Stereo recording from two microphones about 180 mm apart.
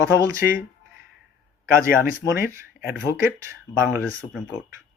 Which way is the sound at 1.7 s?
55° left (ahead or behind).